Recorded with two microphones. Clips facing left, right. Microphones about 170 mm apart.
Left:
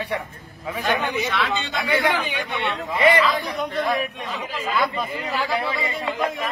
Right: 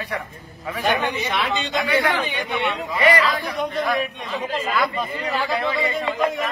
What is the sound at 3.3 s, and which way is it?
Speech, centre (ahead or behind).